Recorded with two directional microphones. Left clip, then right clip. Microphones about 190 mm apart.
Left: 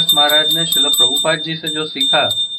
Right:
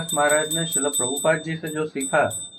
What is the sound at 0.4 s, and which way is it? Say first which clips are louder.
Speech: left 11 dB; centre (ahead or behind).